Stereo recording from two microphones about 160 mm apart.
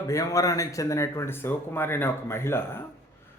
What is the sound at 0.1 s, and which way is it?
A man's voice, 20° left (ahead or behind).